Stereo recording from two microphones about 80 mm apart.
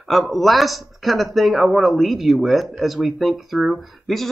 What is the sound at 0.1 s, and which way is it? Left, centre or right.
Speech, centre.